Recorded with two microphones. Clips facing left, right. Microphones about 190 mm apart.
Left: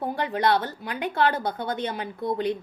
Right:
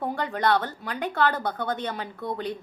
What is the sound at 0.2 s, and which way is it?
A woman's voice, 10° left (ahead or behind).